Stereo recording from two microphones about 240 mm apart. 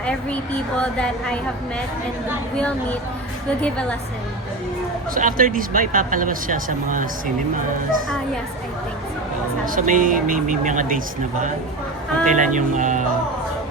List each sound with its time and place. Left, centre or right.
0.0 s a woman's voice: centre
3.6 s a woman's voice: centre
5.1 s speech: right
9.6 s speech: right